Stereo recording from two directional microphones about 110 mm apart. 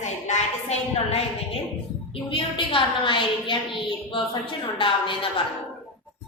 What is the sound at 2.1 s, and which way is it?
A woman's voice, 50° left (ahead or behind).